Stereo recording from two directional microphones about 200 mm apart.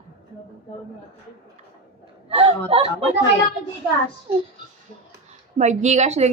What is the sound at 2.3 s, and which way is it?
Speech, 25° right (ahead or behind).